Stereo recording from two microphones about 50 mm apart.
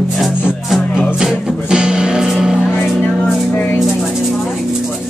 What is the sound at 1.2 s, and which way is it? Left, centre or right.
Music, centre.